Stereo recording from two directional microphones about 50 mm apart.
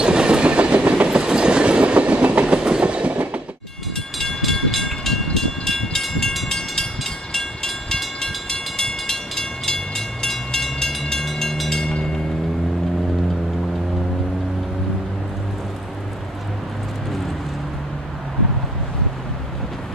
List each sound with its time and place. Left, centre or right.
0.0 s train: centre
1.0 s train: centre
4.2 s train: centre